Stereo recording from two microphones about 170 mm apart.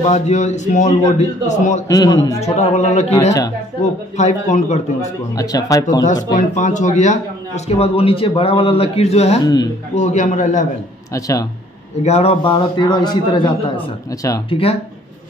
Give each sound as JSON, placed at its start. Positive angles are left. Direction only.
{"t": 0.0, "sound": "a man's voice", "side_deg": 40}
{"t": 1.9, "sound": "a man's voice", "side_deg": 20}
{"t": 2.4, "sound": "a man's voice", "side_deg": 40}
{"t": 5.3, "sound": "a man's voice", "side_deg": 20}
{"t": 6.3, "sound": "a man's voice", "side_deg": 45}
{"t": 9.4, "sound": "a man's voice", "side_deg": 25}
{"t": 9.9, "sound": "a man's voice", "side_deg": 45}
{"t": 11.1, "sound": "a man's voice", "side_deg": 20}
{"t": 12.0, "sound": "a man's voice", "side_deg": 40}